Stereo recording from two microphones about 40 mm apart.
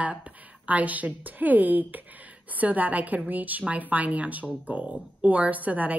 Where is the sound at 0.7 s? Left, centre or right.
Right.